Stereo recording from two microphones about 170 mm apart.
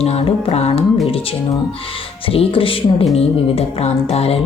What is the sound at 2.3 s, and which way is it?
Speech, 35° left (ahead or behind).